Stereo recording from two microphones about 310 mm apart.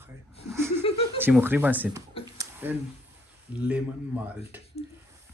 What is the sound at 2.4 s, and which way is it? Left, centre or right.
Tick-tock, centre.